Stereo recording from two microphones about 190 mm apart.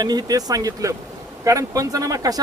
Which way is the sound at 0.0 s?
20° right (ahead or behind).